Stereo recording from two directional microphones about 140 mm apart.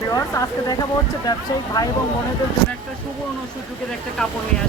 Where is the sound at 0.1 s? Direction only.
25° left (ahead or behind).